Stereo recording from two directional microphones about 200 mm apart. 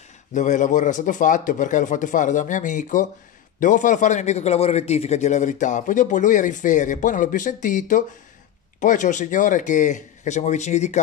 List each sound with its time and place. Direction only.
0.3 s a man's voice: 40° left (ahead or behind)